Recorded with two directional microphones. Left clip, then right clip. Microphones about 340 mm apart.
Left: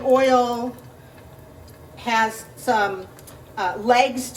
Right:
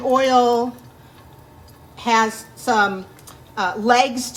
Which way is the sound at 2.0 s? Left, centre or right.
Right.